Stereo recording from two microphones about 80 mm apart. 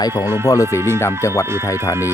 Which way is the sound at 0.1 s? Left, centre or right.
Right.